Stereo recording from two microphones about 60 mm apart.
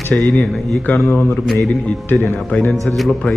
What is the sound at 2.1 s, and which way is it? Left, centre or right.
Speech, left.